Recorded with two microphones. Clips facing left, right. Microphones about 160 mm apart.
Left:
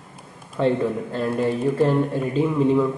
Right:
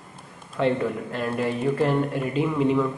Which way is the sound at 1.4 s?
Centre (ahead or behind).